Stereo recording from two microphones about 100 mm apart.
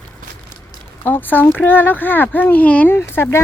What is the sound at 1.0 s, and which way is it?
A child's voice, 20° left (ahead or behind).